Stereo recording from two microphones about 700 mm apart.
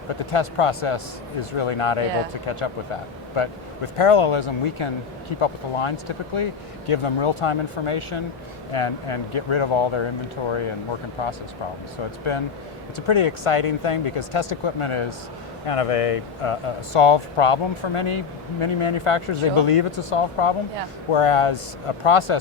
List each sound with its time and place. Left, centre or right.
0.3 s speech: left
3.3 s speech: left
13.1 s speech: left